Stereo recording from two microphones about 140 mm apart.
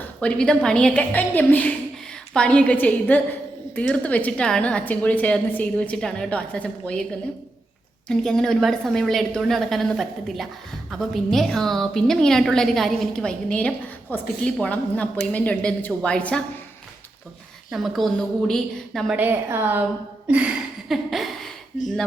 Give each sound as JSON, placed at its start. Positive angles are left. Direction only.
{"t": 0.2, "sound": "a woman's voice", "side_deg": 5}
{"t": 8.0, "sound": "a woman's voice", "side_deg": 5}
{"t": 17.7, "sound": "a woman's voice", "side_deg": 0}
{"t": 19.1, "sound": "a woman's voice", "side_deg": -15}
{"t": 20.2, "sound": "a sound", "side_deg": -10}
{"t": 21.7, "sound": "speech", "side_deg": 60}